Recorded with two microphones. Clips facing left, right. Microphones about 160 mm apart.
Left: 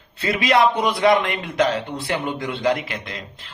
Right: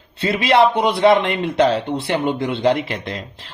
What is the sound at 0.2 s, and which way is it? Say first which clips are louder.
A man's voice: right 3 dB; 30° right (ahead or behind).